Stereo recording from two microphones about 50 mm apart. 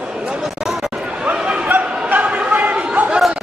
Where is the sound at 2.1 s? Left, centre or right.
Right.